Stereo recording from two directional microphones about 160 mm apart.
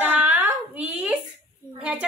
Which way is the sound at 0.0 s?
10° right (ahead or behind).